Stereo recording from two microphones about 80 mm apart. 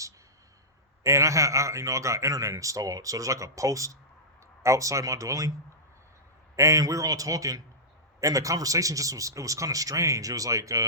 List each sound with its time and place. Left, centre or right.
1.0 s a man's voice: right
6.6 s a man's voice: right